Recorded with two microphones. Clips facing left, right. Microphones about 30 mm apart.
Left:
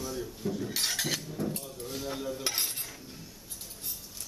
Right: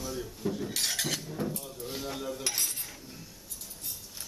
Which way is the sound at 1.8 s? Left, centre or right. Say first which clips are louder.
Even; centre.